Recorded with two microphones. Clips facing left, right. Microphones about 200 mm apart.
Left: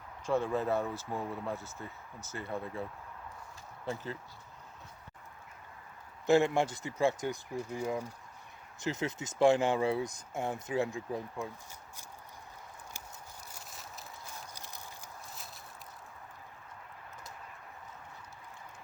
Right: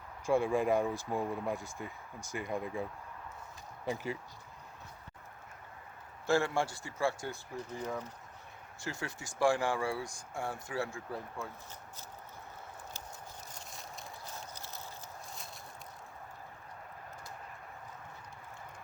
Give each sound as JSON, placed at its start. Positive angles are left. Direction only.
{"t": 0.3, "sound": "speech", "side_deg": -10}
{"t": 3.8, "sound": "speech", "side_deg": -15}
{"t": 6.2, "sound": "speech", "side_deg": 20}
{"t": 13.5, "sound": "a sound", "side_deg": 0}
{"t": 14.5, "sound": "clip-clop", "side_deg": 15}